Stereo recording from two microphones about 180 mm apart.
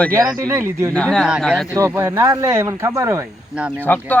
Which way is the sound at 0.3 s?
15° right (ahead or behind).